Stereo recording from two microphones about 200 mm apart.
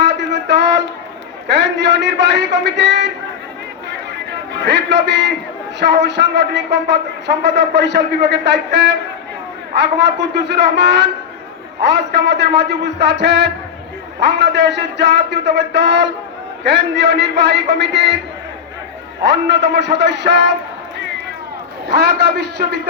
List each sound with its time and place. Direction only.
0.0 s music: 60° right (ahead or behind)
1.5 s a man's voice: 60° right (ahead or behind)
4.6 s speech: 60° right (ahead or behind)
19.2 s speech: 60° right (ahead or behind)
21.8 s speech: 55° right (ahead or behind)